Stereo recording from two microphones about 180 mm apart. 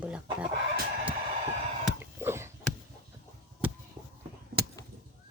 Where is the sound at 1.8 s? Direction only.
10° right (ahead or behind).